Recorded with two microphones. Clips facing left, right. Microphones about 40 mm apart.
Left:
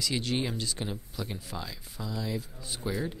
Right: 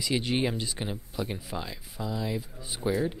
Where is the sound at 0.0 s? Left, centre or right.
Centre.